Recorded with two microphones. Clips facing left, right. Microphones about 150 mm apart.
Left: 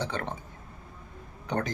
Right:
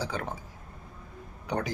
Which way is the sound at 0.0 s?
5° right (ahead or behind).